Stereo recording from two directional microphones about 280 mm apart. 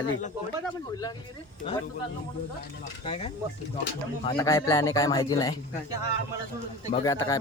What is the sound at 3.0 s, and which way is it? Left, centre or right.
Speech, centre.